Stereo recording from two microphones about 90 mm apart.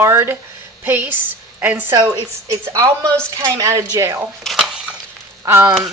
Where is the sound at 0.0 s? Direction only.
25° right (ahead or behind).